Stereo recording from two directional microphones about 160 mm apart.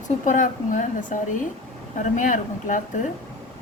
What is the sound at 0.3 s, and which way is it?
A woman's voice, 55° left (ahead or behind).